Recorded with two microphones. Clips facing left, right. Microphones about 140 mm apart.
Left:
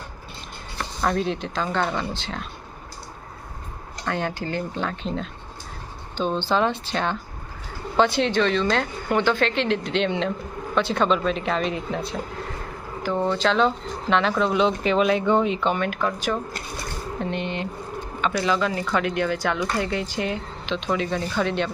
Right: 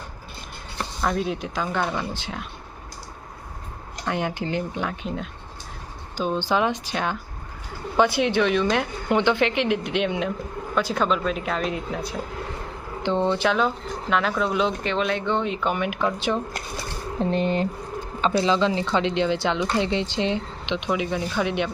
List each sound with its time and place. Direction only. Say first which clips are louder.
1.0 s speech: left 1 dB; 5° right (ahead or behind)
4.0 s speech: right 1 dB; 15° right (ahead or behind)
13.0 s speech: right 1 dB; 20° right (ahead or behind)
17.2 s speech: right 6 dB; 40° right (ahead or behind); by 21.7 s 15° right (ahead or behind)